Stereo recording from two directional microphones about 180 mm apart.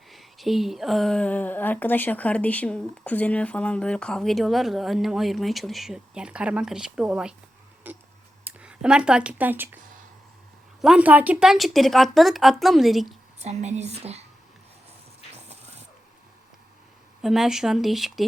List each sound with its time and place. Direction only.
0.1 s a woman's voice: centre (ahead or behind)
7.9 s tick: 10° right (ahead or behind)
8.4 s speech: 5° right (ahead or behind)
10.8 s a woman's voice: 5° right (ahead or behind)
13.4 s a woman's voice: 40° right (ahead or behind)
15.4 s a sound: 35° right (ahead or behind)
17.2 s a woman's voice: centre (ahead or behind)